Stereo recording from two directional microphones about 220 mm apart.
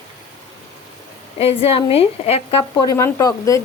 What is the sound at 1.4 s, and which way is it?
A woman's voice, 25° left (ahead or behind).